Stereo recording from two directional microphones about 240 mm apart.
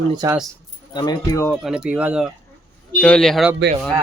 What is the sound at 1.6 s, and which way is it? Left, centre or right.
A man's voice, centre.